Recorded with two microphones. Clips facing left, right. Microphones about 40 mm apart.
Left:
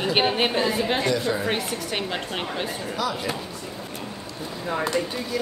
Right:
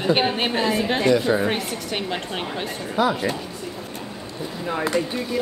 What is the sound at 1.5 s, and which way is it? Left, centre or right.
Speech, centre.